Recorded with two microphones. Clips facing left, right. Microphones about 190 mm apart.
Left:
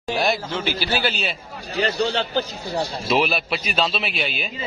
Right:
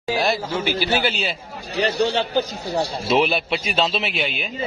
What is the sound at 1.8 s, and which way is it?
Speech, 15° right (ahead or behind).